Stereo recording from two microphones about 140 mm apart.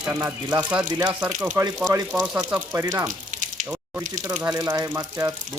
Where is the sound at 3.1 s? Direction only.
65° right (ahead or behind).